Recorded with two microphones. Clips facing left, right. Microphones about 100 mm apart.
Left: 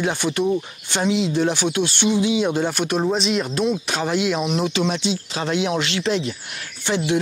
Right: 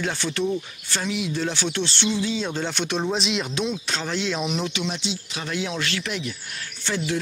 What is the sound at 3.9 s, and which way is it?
Speech, 15° left (ahead or behind).